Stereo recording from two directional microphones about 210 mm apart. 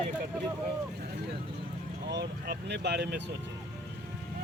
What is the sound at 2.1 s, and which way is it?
Speech, 55° right (ahead or behind).